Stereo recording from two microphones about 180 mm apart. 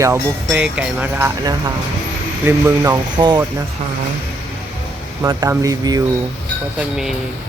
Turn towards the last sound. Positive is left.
turn(degrees=-20)  # may be behind; listen again after turning